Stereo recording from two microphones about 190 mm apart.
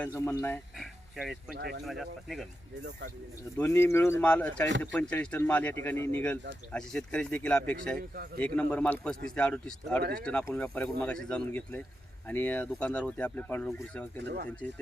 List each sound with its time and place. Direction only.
0.0 s speech: 10° left (ahead or behind)
0.8 s oink: centre (ahead or behind)
1.5 s speech: 65° right (ahead or behind)
1.8 s speech: centre (ahead or behind)
3.6 s speech: 10° left (ahead or behind)
7.9 s a man's voice: 55° right (ahead or behind)
8.4 s speech: 5° left (ahead or behind)
10.0 s a man's voice: 55° right (ahead or behind)
10.2 s speech: 5° left (ahead or behind)
14.2 s speech: 65° right (ahead or behind)